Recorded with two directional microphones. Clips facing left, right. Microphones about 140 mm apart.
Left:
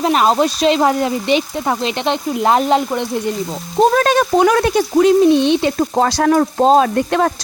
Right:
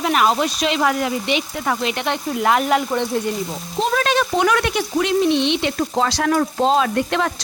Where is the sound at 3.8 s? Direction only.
45° left (ahead or behind).